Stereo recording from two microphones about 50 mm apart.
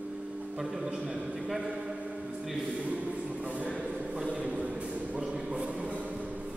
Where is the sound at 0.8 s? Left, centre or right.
Right.